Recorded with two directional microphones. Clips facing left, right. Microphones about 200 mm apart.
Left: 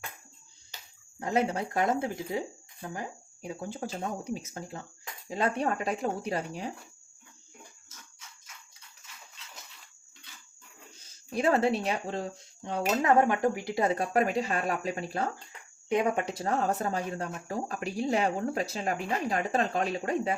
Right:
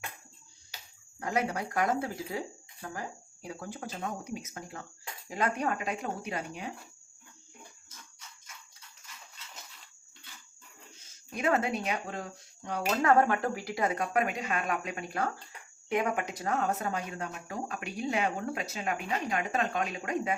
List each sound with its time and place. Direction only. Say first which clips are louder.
1.2 s speech: left 3 dB; 25° left (ahead or behind)
11.3 s speech: left 4 dB; 30° left (ahead or behind)